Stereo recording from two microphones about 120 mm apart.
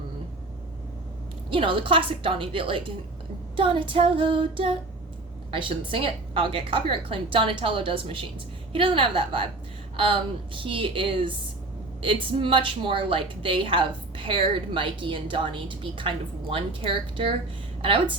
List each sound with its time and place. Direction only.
1.5 s a woman's voice: 45° right (ahead or behind)